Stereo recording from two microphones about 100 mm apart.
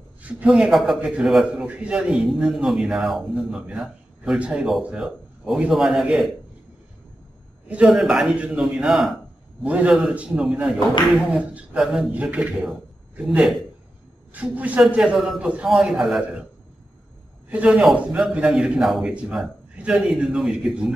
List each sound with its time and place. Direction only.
0.2 s a man's voice: 15° right (ahead or behind)
7.6 s a man's voice: 15° right (ahead or behind)
7.9 s a man's voice: centre (ahead or behind)
9.6 s a man's voice: 10° right (ahead or behind)
12.1 s a man's voice: 15° right (ahead or behind)
17.5 s a man's voice: 10° right (ahead or behind)